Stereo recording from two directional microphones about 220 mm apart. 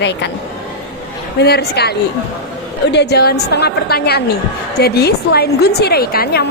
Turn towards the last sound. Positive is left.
turn(degrees=45)  # may be behind; listen again after turning